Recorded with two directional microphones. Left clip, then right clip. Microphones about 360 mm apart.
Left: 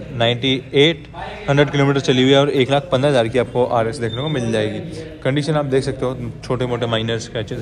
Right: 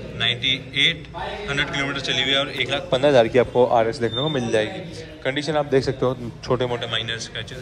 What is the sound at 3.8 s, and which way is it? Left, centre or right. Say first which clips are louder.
Speech: even; centre.